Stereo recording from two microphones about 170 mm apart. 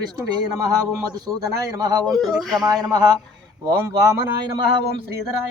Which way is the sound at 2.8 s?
20° right (ahead or behind).